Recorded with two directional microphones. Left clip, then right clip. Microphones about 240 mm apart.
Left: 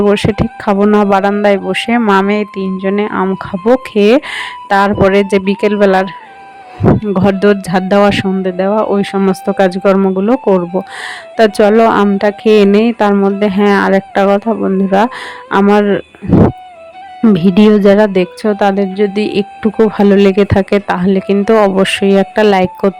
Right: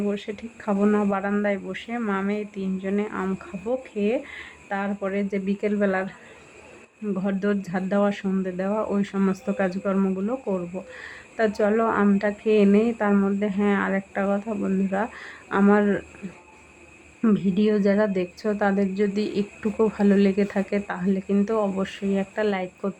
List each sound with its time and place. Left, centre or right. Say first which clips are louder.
0.1 s speech: left 19 dB; left
17.2 s speech: left 14 dB; left